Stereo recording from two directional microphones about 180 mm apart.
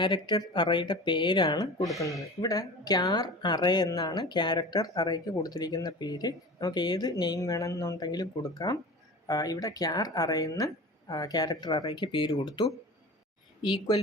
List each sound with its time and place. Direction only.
0.0 s a woman's voice: 25° left (ahead or behind)